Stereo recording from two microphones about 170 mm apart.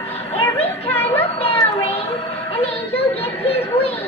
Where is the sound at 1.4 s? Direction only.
35° left (ahead or behind).